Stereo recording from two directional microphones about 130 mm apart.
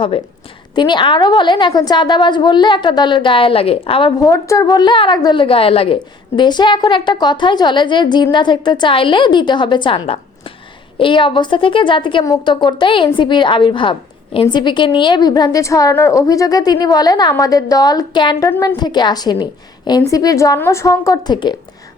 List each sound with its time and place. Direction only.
0.8 s a woman's voice: 35° left (ahead or behind)
4.2 s a woman's voice: 25° left (ahead or behind)